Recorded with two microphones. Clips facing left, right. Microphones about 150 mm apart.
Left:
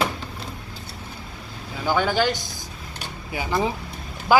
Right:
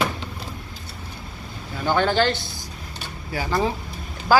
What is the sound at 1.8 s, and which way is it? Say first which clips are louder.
A woman's voice: right 1 dB; 10° left (ahead or behind).